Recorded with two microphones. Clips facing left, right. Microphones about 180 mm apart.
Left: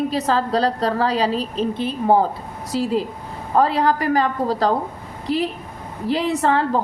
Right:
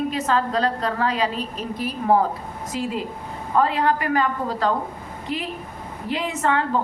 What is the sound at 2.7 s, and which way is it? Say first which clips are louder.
A woman's voice: left 6 dB; 35° left (ahead or behind).